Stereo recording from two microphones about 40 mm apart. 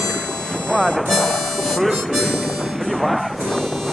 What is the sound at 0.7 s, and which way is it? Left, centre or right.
Speech, centre.